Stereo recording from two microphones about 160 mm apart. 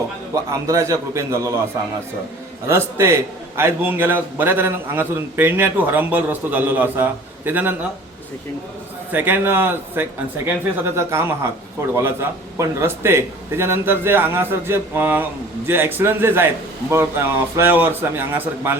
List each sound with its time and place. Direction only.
0.5 s a man's voice: 20° right (ahead or behind)
2.6 s a man's voice: 15° right (ahead or behind)
9.1 s a man's voice: 10° right (ahead or behind)